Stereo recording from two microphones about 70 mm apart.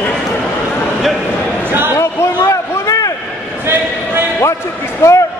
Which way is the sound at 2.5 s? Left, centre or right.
Left.